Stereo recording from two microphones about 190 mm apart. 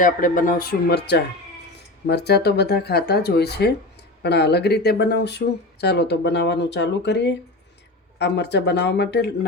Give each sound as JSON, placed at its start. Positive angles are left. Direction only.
{"t": 0.0, "sound": "speech", "side_deg": 45}